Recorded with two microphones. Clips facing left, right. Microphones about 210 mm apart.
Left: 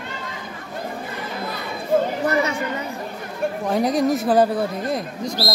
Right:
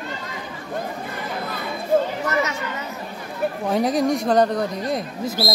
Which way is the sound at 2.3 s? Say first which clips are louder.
Left 3 dB; 30° left (ahead or behind).